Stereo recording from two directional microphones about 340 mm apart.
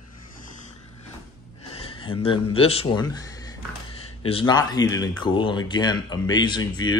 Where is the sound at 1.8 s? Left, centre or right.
Centre.